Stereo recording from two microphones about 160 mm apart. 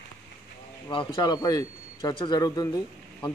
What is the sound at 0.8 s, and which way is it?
Speech, 25° left (ahead or behind).